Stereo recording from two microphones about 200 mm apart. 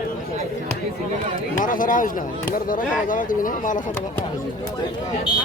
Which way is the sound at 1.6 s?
40° left (ahead or behind).